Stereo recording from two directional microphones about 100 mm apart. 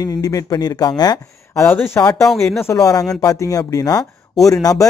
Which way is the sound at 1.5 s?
20° left (ahead or behind).